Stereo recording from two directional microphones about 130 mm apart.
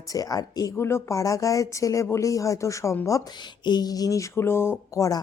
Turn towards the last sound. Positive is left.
turn(degrees=25)  # may be behind; listen again after turning